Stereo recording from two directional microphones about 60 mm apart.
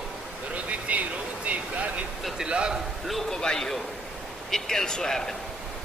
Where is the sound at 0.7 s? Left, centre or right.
Right.